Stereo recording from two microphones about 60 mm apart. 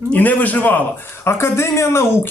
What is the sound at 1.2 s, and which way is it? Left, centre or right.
Speech, left.